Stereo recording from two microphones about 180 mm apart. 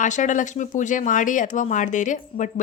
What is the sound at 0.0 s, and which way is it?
A woman's voice, 45° left (ahead or behind).